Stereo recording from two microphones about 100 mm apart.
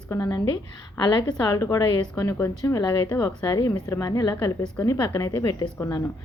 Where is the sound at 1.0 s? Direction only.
50° left (ahead or behind).